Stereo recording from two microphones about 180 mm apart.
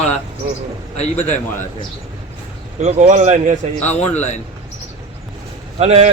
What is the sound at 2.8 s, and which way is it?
Speech, 40° right (ahead or behind).